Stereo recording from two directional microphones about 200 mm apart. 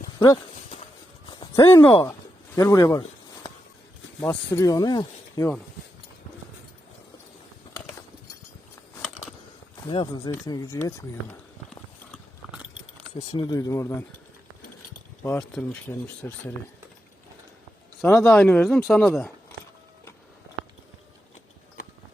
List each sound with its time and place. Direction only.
0.2 s clip-clop: 25° left (ahead or behind)
1.3 s a sound: 25° left (ahead or behind)
1.6 s speech: 15° left (ahead or behind)
4.2 s speech: 10° left (ahead or behind)
9.9 s speech: 20° left (ahead or behind)
12.1 s biting: 5° right (ahead or behind)
13.1 s speech: 15° left (ahead or behind)
15.2 s speech: 5° left (ahead or behind)
18.0 s speech: centre (ahead or behind)